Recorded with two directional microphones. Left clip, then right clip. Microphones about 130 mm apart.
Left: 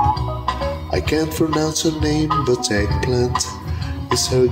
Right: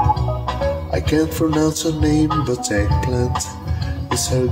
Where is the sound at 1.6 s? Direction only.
50° left (ahead or behind).